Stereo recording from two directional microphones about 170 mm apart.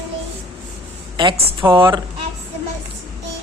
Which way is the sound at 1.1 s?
25° right (ahead or behind).